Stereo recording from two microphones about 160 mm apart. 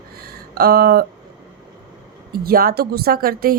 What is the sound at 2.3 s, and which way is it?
A woman's voice, 70° right (ahead or behind).